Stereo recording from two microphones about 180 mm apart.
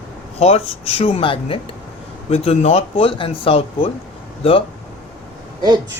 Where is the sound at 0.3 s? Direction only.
35° left (ahead or behind).